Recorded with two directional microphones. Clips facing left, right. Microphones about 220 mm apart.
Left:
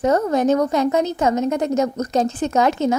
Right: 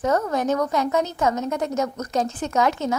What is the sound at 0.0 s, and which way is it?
A woman's voice, 20° left (ahead or behind).